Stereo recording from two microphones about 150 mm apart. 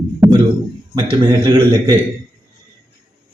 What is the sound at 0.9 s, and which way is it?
A man's voice, 30° right (ahead or behind).